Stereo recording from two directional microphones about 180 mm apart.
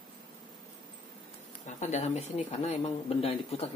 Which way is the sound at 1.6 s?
40° left (ahead or behind).